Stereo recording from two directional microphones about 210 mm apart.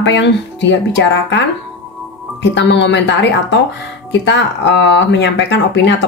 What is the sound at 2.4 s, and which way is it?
Speech, 55° left (ahead or behind).